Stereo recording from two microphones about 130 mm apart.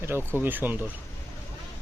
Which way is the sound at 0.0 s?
20° right (ahead or behind).